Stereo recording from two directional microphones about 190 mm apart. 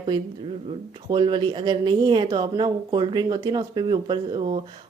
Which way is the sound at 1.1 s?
25° right (ahead or behind).